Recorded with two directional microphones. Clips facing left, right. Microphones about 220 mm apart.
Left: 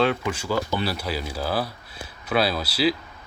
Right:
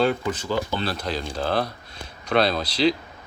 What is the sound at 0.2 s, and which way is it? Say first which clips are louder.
Speech: even; 10° left (ahead or behind).